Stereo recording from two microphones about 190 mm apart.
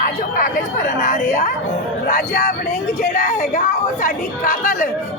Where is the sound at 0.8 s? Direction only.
40° left (ahead or behind).